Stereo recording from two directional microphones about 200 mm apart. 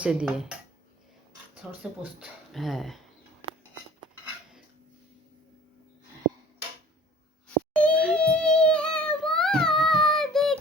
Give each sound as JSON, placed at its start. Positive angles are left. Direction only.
{"t": 0.0, "sound": "speech", "side_deg": -5}
{"t": 1.6, "sound": "speech", "side_deg": -5}
{"t": 7.7, "sound": "music", "side_deg": 5}